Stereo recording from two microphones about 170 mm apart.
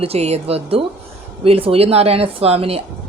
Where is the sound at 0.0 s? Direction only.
35° right (ahead or behind).